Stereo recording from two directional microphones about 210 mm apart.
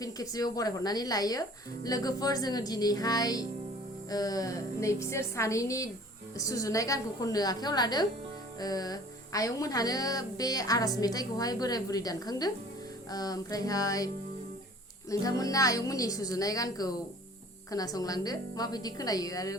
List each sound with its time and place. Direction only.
0.0 s music: 15° left (ahead or behind)
15.1 s music: 15° left (ahead or behind)